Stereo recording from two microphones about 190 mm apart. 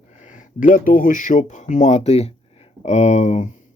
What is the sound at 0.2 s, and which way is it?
Speech, 40° left (ahead or behind).